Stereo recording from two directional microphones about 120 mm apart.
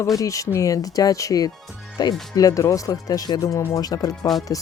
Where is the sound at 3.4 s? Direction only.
20° left (ahead or behind).